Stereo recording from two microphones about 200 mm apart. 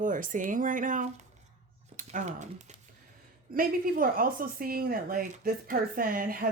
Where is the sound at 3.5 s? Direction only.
45° right (ahead or behind).